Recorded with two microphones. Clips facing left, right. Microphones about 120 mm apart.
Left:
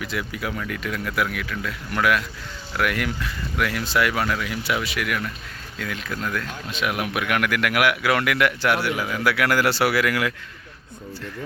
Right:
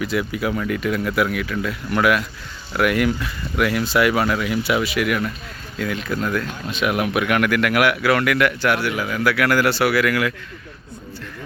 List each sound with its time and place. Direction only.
0.0 s speech: 5° right (ahead or behind); by 10.3 s 20° left (ahead or behind)